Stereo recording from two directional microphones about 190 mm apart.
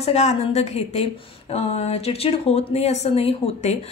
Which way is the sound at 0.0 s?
35° left (ahead or behind).